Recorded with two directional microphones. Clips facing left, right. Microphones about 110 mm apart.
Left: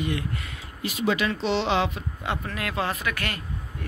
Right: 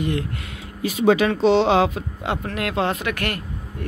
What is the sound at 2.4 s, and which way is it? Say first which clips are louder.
Speech: right 7 dB; 65° right (ahead or behind).